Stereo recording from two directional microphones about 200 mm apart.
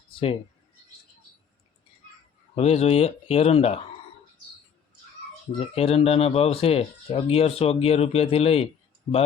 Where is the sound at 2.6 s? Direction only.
30° left (ahead or behind).